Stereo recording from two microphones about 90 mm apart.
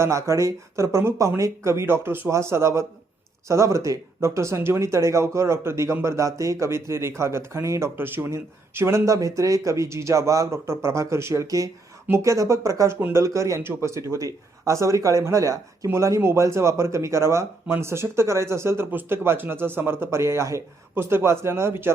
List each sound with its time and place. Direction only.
0.0 s speech: 35° right (ahead or behind)
12.0 s a man's voice: 30° right (ahead or behind)